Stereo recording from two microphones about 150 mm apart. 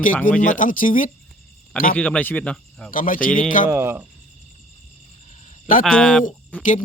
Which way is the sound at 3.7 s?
15° right (ahead or behind).